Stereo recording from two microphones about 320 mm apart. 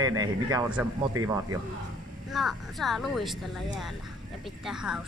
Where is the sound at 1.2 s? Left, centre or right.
Right.